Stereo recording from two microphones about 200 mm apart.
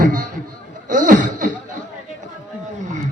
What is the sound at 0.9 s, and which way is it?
Chuckle, 40° right (ahead or behind).